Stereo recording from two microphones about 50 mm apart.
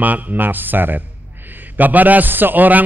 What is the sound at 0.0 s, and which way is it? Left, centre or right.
A man's voice, right.